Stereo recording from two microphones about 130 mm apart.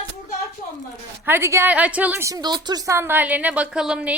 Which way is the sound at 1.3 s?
20° right (ahead or behind).